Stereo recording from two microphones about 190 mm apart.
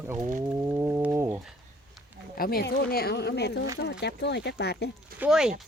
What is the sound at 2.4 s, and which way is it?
Speech, 55° left (ahead or behind).